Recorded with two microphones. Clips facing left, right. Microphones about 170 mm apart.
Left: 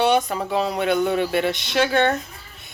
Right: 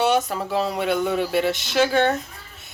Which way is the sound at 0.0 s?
5° right (ahead or behind).